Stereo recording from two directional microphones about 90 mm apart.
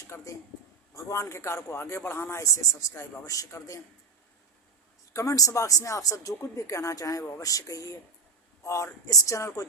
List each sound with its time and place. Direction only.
0.1 s a man's voice: 30° left (ahead or behind)
5.1 s a man's voice: 35° left (ahead or behind)